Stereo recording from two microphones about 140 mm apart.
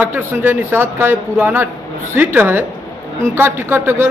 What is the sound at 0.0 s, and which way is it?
Speech, 10° right (ahead or behind).